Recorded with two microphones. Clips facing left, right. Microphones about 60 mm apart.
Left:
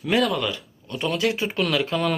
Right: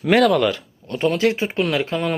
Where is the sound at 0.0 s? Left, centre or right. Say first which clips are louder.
Right 7 dB; right.